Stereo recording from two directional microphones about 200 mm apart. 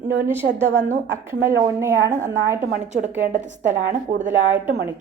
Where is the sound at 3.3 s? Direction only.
40° right (ahead or behind).